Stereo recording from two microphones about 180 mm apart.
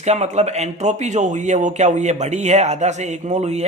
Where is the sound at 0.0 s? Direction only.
40° right (ahead or behind).